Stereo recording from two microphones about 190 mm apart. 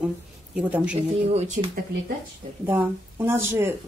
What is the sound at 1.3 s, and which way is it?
Speech, 35° right (ahead or behind).